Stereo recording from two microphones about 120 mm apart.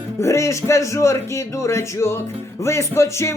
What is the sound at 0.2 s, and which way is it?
A man's voice, 25° left (ahead or behind).